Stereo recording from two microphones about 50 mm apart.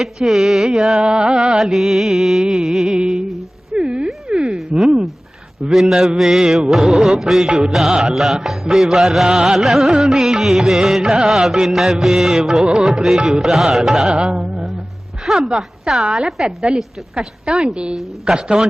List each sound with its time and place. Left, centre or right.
0.0 s music: centre
0.9 s music: centre
3.8 s a sound: centre
4.7 s music: centre
5.6 s music: centre
14.1 s music: right
15.2 s a woman's voice: centre
16.0 s music: centre
17.9 s music: centre